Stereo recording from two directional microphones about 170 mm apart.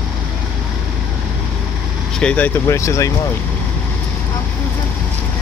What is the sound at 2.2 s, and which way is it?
Speech, 5° left (ahead or behind).